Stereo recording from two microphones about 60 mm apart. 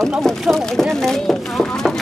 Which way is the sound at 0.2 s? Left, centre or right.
Centre.